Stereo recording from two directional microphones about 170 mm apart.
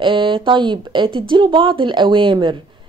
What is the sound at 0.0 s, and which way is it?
Speech, 30° right (ahead or behind).